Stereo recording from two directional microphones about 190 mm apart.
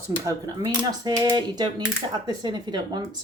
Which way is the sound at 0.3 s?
20° right (ahead or behind).